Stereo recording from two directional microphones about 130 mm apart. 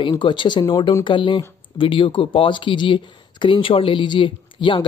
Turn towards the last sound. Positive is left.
turn(degrees=40)  # may be behind; listen again after turning